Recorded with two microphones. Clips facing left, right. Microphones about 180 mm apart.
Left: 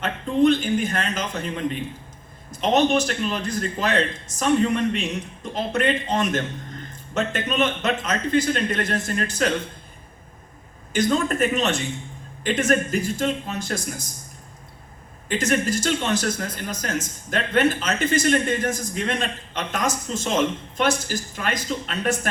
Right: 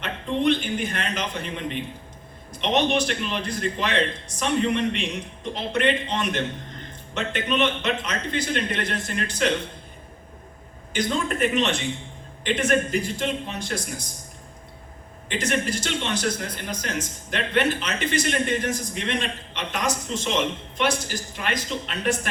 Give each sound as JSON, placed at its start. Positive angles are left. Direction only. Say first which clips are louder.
{"t": 0.0, "sound": "a man's voice", "louder": "left 4 dB", "side_deg": 45}
{"t": 10.9, "sound": "a man's voice", "louder": "left 4 dB", "side_deg": 45}
{"t": 15.3, "sound": "a man's voice", "louder": "left 3 dB", "side_deg": 45}